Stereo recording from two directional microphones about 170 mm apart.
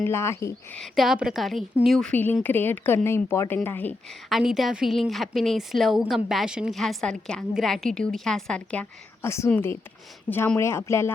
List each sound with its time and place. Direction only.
0.0 s a woman's voice: 15° left (ahead or behind)
0.8 s a woman's voice: centre (ahead or behind)
4.3 s a woman's voice: centre (ahead or behind); by 11.1 s 15° left (ahead or behind)